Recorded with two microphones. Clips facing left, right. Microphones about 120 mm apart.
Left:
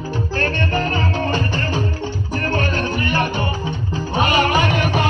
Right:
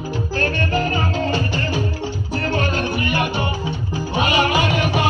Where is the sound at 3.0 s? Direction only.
45° left (ahead or behind).